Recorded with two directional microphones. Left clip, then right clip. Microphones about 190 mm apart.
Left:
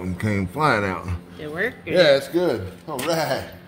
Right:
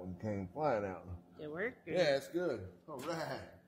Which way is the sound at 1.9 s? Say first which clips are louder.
Left 17 dB; 15° left (ahead or behind).